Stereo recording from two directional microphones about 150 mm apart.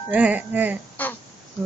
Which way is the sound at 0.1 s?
10° right (ahead or behind).